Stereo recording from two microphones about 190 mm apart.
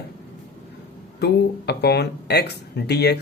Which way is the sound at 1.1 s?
60° left (ahead or behind).